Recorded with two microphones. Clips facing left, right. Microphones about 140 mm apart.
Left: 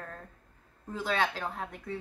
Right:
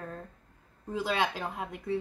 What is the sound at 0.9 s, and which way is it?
Speech, 10° right (ahead or behind).